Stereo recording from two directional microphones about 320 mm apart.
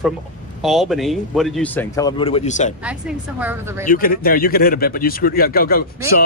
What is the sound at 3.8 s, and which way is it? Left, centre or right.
Speech, left.